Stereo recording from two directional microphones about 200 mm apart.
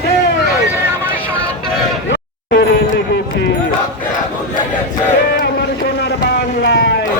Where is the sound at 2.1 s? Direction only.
65° left (ahead or behind).